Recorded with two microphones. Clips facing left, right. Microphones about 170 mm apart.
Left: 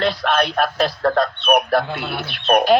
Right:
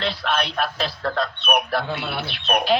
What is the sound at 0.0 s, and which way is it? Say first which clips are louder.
A man's voice: left 6 dB; 45° left (ahead or behind).